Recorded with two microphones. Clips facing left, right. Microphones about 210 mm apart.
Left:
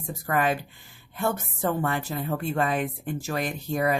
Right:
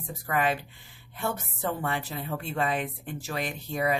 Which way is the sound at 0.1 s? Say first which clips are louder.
Left 2 dB; 45° left (ahead or behind).